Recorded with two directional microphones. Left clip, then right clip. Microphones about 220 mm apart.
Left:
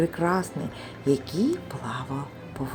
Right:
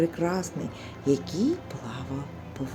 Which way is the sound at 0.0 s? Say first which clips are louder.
Left 2 dB; 5° left (ahead or behind).